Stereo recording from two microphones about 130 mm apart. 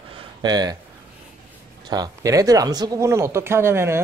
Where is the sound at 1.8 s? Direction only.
35° right (ahead or behind).